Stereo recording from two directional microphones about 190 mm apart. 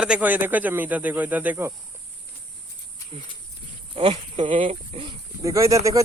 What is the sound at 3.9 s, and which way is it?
Speech, 25° right (ahead or behind).